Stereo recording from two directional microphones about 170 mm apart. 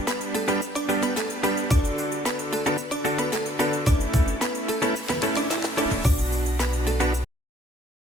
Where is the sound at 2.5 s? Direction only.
Centre (ahead or behind).